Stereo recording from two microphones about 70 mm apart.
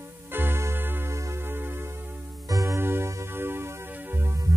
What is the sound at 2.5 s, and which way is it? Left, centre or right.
Music, right.